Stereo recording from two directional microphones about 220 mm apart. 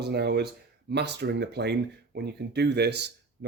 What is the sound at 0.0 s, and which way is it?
Speech, 50° right (ahead or behind).